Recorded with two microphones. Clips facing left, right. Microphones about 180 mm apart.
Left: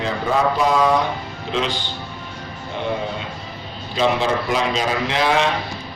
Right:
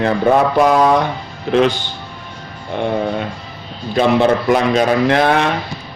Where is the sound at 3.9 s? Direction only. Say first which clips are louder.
Right 6 dB; 55° right (ahead or behind).